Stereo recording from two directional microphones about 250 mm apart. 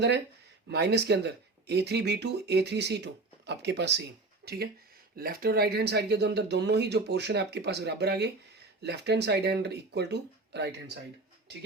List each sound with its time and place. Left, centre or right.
0.7 s speech: right